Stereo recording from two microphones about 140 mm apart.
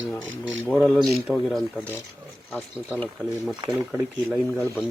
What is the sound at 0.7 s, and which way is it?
Speech, 10° left (ahead or behind).